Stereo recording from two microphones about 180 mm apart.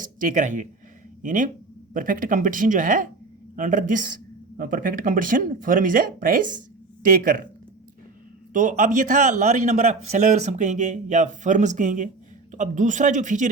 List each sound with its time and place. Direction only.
0.0 s a man's voice: 50° right (ahead or behind)
8.5 s a man's voice: 45° right (ahead or behind)